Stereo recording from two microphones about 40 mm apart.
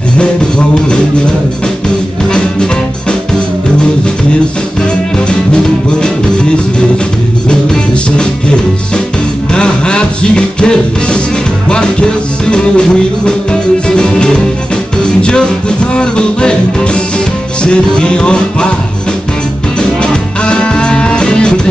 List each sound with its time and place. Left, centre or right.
0.2 s music: left
2.2 s music: centre
5.3 s music: left
7.4 s music: left
20.0 s music: left